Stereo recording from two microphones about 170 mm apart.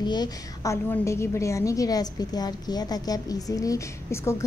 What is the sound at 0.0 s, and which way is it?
A woman's voice, 25° left (ahead or behind).